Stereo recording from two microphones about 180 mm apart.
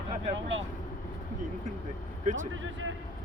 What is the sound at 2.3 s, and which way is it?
Speech, 90° right.